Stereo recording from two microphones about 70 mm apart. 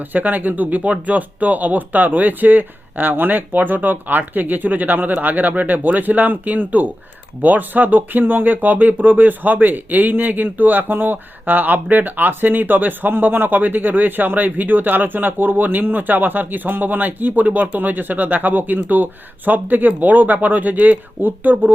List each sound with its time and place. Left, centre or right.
0.1 s speech: right